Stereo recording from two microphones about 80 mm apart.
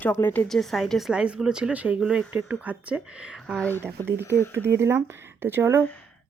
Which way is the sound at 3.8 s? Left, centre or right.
Right.